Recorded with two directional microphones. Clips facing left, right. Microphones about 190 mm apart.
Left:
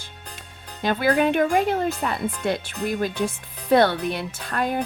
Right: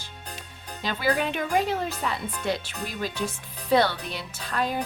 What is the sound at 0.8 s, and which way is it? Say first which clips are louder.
Speech: left 6 dB; 55° left (ahead or behind).